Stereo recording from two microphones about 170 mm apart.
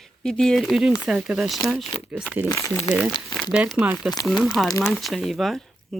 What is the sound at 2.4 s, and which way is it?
Speech, 20° left (ahead or behind).